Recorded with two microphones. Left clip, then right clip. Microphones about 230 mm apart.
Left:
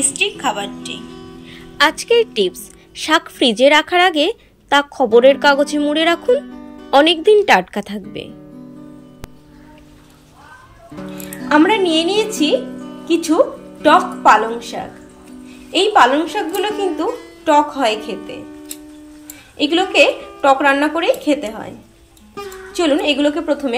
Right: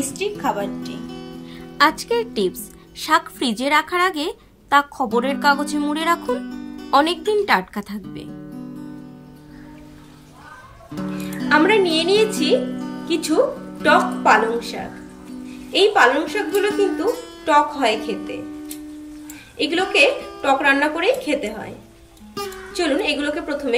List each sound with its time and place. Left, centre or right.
0.2 s a woman's voice: centre
1.8 s a woman's voice: centre
11.4 s a woman's voice: centre
19.5 s a woman's voice: centre
22.7 s a woman's voice: centre